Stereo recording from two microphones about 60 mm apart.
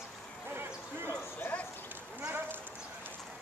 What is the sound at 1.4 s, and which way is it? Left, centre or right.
Dog, left.